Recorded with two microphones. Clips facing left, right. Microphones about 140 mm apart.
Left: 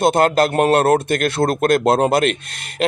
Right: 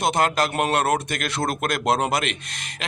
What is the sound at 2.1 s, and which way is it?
Speech, 55° left (ahead or behind).